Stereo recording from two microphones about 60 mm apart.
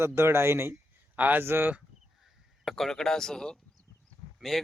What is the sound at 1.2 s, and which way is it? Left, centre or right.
Speech, right.